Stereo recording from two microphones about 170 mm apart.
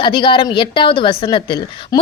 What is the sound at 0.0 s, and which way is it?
A woman's voice, 30° left (ahead or behind).